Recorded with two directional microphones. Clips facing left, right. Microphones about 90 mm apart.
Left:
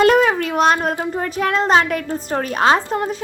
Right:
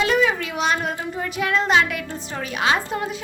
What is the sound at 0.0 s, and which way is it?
A woman's voice, 50° left (ahead or behind).